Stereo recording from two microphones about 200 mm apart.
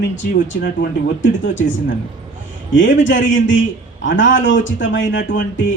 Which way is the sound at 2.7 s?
65° left (ahead or behind).